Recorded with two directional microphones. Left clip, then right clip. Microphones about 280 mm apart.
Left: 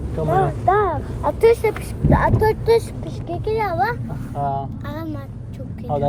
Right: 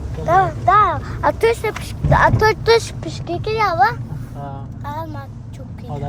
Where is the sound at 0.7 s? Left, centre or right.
Right.